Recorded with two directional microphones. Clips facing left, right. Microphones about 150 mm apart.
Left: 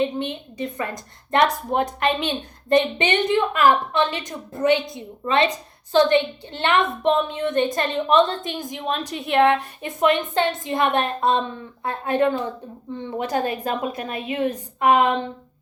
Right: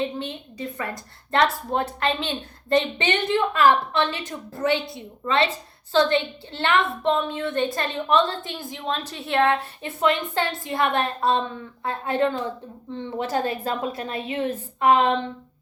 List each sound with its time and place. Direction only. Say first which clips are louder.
0.0 s a woman's voice: left 4 dB; 20° left (ahead or behind)